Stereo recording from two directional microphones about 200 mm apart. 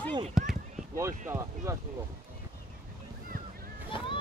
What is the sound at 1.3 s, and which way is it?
Speech, 15° right (ahead or behind).